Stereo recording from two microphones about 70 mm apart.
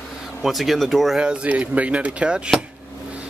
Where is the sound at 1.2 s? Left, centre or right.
Centre.